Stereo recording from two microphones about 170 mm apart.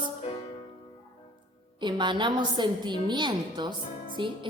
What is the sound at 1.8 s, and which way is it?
A woman's voice, 25° right (ahead or behind).